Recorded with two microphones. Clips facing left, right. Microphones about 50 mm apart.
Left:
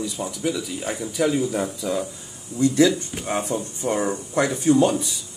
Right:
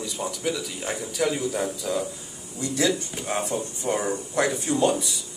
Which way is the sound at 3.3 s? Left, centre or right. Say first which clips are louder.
Left 2 dB; left.